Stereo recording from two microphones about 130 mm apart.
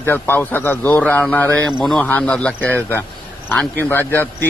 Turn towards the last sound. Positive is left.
turn(degrees=15)  # may be behind; listen again after turning